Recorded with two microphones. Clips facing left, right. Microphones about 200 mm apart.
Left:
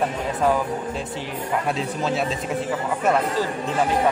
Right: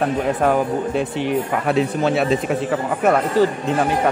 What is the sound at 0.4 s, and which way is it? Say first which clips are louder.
Speech: even; 60° right (ahead or behind).